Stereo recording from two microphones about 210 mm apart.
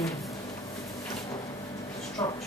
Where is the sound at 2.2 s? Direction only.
15° left (ahead or behind).